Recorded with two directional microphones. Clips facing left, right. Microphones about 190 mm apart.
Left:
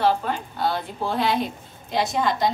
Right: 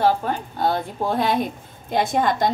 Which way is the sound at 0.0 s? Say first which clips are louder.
Right 2 dB; 45° right (ahead or behind).